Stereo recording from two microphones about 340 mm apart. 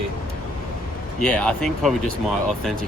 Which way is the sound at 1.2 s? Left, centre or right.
Centre.